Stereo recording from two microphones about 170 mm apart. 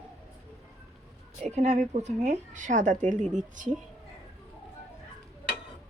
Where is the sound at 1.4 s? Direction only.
40° right (ahead or behind).